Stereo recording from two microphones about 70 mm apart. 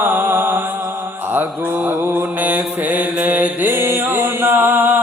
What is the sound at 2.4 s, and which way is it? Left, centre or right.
Mantra, right.